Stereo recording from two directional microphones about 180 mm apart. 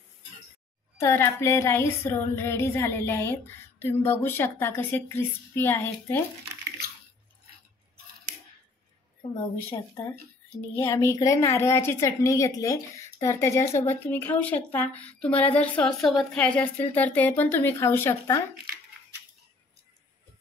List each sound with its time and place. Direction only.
0.9 s a woman's voice: 15° left (ahead or behind)
9.7 s a woman's voice: 15° left (ahead or behind)